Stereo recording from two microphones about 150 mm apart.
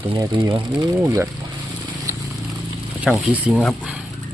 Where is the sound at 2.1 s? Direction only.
20° right (ahead or behind).